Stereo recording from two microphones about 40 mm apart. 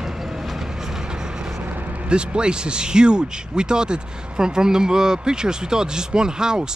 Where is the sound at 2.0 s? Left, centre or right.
Right.